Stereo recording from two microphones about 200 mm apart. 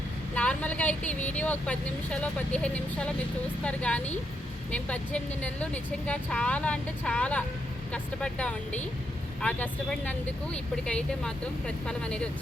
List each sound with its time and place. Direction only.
0.3 s speech: 5° left (ahead or behind)